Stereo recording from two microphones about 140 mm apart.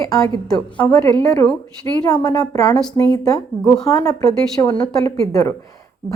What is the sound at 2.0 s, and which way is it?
Speech, 30° left (ahead or behind).